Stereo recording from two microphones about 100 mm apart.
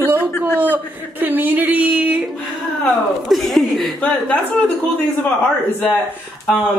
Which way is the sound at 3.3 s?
Centre (ahead or behind).